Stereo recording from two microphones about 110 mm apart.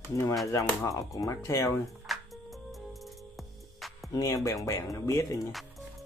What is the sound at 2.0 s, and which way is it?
Music, centre (ahead or behind).